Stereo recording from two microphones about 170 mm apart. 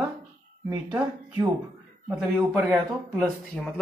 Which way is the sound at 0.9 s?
20° right (ahead or behind).